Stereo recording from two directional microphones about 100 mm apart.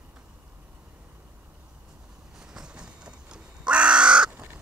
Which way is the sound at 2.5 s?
10° right (ahead or behind).